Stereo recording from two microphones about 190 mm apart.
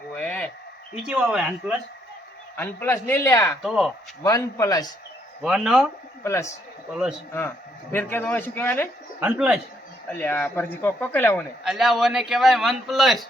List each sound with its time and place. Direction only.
0.2 s a sound: 10° left (ahead or behind)
0.9 s a man's voice: 5° right (ahead or behind)
2.6 s speech: 10° left (ahead or behind)
3.6 s a man's voice: 5° right (ahead or behind)
4.2 s speech: 15° left (ahead or behind)
5.4 s a man's voice: centre (ahead or behind)
6.2 s speech: 15° left (ahead or behind)
6.9 s a man's voice: 5° right (ahead or behind)
7.9 s speech: 10° left (ahead or behind)
9.2 s a man's voice: 5° right (ahead or behind)
10.1 s speech: 10° left (ahead or behind)
11.6 s a man's voice: centre (ahead or behind)